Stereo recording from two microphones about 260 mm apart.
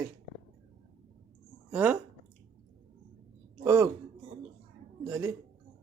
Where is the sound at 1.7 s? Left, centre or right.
Centre.